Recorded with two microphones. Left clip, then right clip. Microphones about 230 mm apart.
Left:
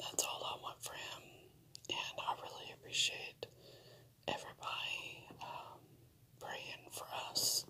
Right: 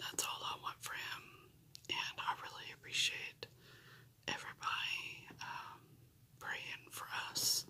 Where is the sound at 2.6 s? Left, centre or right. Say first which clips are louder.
Left 1 dB; centre.